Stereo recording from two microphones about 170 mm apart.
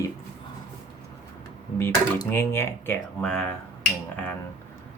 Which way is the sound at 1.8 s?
15° left (ahead or behind).